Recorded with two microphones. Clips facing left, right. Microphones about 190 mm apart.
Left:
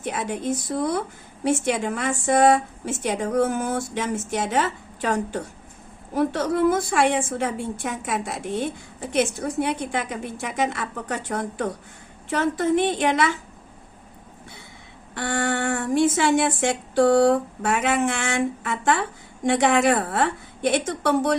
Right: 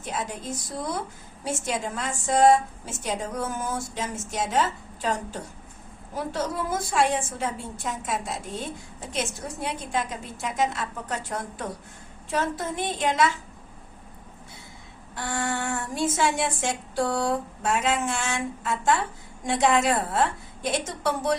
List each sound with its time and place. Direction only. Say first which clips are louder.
0.0 s a woman's voice: left 6 dB; 60° left (ahead or behind)
15.1 s a woman's voice: left 5 dB; 65° left (ahead or behind)